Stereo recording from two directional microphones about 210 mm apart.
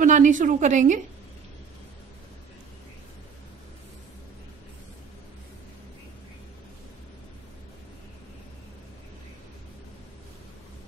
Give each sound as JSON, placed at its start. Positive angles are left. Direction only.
{"t": 0.0, "sound": "a woman's voice", "side_deg": -35}